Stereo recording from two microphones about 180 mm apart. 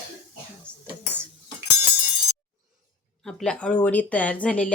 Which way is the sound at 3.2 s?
5° left (ahead or behind).